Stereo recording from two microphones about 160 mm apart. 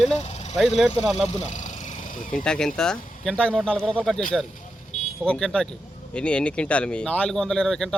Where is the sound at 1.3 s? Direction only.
45° left (ahead or behind).